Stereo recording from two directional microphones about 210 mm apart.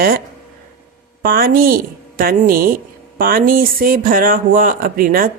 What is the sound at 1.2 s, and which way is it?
Speech, 45° right (ahead or behind).